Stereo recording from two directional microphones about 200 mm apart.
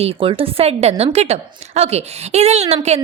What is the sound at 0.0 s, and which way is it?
A woman's voice, 30° right (ahead or behind).